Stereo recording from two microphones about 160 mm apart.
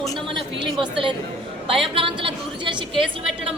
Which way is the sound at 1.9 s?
30° right (ahead or behind).